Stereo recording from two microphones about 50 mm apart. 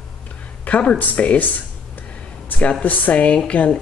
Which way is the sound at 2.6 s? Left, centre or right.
Left.